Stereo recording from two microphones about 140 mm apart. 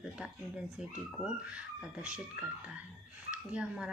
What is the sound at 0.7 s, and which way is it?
Speech, 5° right (ahead or behind).